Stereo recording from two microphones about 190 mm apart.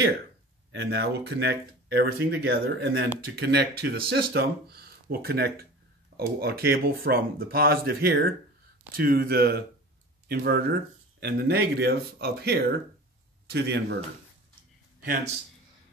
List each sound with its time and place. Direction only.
0.7 s speech: 60° right (ahead or behind)